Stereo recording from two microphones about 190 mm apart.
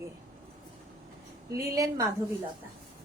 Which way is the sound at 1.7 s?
15° right (ahead or behind).